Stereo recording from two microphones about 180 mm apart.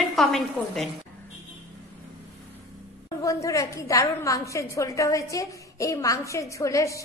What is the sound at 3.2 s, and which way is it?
A woman's voice, 20° left (ahead or behind).